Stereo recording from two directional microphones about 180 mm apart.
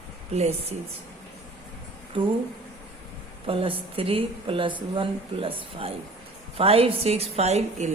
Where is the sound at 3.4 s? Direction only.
30° right (ahead or behind).